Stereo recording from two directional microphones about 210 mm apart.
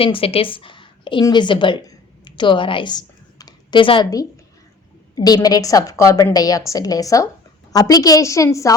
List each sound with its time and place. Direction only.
0.0 s a woman's voice: 25° left (ahead or behind)